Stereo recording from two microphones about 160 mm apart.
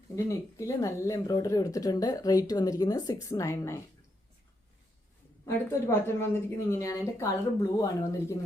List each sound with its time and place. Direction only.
0.3 s speech: 20° left (ahead or behind)
5.5 s speech: 15° left (ahead or behind)